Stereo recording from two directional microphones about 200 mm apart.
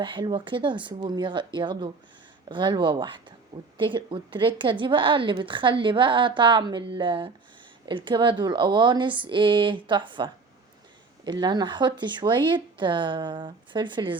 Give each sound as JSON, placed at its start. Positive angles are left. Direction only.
{"t": 0.0, "sound": "speech", "side_deg": -25}